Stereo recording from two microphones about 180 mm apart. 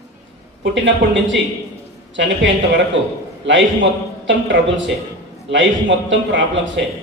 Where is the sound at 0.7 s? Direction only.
85° right.